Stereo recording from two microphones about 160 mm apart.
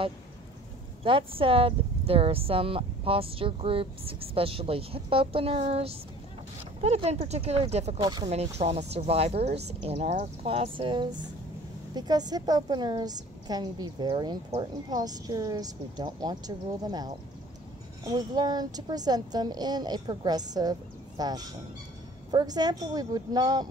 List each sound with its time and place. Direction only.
1.0 s speech: 35° right (ahead or behind)
8.0 s speech: 25° right (ahead or behind)
8.5 s speech: 40° right (ahead or behind); by 23.7 s 25° right (ahead or behind)